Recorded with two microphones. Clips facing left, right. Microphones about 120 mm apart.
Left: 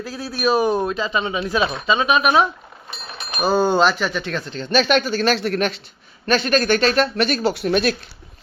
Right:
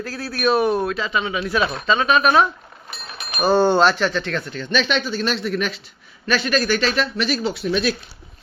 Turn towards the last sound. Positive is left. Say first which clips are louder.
# left 3 dB
turn(degrees=55)  # may be behind; listen again after turning